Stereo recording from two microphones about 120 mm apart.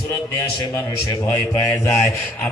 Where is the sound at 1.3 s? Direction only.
25° left (ahead or behind).